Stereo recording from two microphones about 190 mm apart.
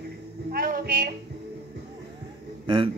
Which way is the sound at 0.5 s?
50° right (ahead or behind).